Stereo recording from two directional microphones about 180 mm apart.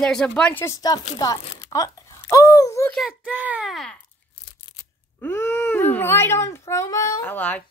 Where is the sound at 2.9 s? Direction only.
Centre (ahead or behind).